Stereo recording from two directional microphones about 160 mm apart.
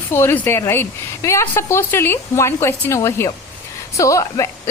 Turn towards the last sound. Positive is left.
turn(degrees=20)  # may be behind; listen again after turning